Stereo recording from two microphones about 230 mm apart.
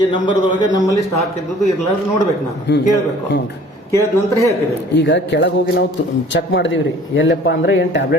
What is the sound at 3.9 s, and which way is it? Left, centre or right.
Speech, centre.